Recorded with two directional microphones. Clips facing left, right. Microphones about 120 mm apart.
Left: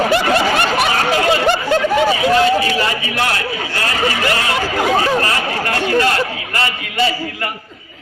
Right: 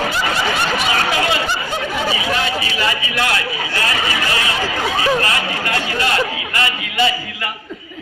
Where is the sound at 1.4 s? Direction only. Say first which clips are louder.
Left 8 dB; 65° left (ahead or behind).